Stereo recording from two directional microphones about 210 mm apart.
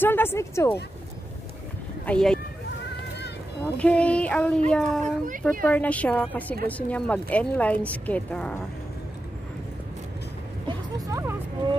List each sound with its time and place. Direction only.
0.0 s a woman's voice: 10° left (ahead or behind)
2.0 s speech: 5° left (ahead or behind)
3.7 s speech: 5° left (ahead or behind)
5.0 s speech: 40° right (ahead or behind)
5.7 s a woman's voice: 5° left (ahead or behind)
10.7 s a sound: 15° right (ahead or behind)